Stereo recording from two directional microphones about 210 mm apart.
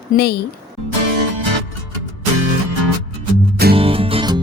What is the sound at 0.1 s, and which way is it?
Speech, 45° left (ahead or behind).